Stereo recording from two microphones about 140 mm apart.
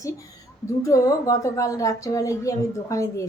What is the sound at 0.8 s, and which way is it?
A woman's voice, 25° left (ahead or behind).